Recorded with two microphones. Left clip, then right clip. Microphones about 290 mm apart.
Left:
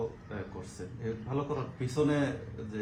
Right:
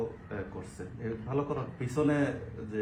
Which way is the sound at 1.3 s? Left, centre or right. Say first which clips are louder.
Right 3 dB; left.